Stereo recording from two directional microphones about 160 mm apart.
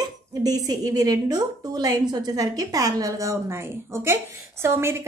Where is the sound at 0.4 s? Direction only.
25° right (ahead or behind).